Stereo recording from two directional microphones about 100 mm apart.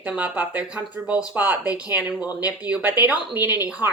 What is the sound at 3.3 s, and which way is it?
Speech, 40° left (ahead or behind).